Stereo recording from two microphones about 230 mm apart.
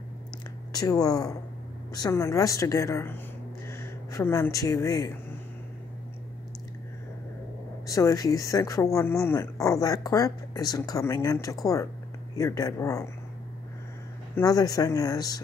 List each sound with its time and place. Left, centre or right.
0.7 s speech: centre
7.8 s speech: centre
14.3 s speech: centre